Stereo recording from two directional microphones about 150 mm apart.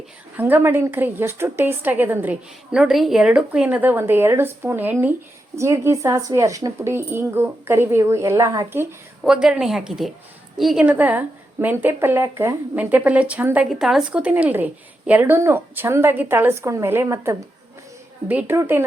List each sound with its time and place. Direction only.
0.3 s speech: 10° right (ahead or behind)
9.2 s a woman's voice: 5° right (ahead or behind)